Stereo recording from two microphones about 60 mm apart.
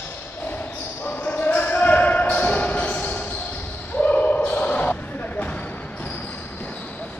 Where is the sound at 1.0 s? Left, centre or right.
Left.